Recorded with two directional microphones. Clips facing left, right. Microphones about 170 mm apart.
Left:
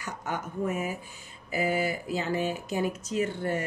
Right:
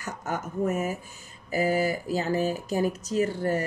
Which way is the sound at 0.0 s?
45° right (ahead or behind).